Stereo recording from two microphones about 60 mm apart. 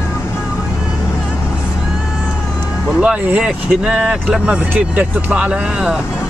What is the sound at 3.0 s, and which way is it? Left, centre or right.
Speech, right.